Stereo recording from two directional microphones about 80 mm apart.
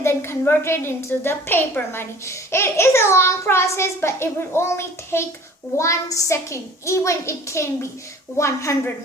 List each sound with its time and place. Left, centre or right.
0.0 s a woman's voice: left